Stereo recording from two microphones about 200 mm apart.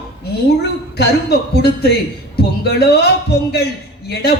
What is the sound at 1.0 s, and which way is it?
Speech, 55° left (ahead or behind).